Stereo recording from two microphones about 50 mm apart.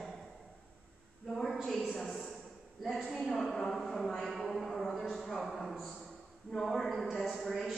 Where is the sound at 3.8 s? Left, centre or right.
Centre.